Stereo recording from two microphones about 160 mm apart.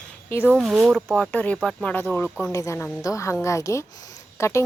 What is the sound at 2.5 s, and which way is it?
A woman's voice, 20° left (ahead or behind).